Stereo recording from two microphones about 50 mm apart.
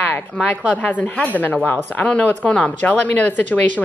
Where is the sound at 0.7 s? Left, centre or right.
Left.